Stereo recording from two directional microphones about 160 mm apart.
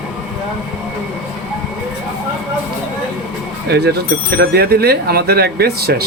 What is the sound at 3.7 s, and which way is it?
Speech, 90° right.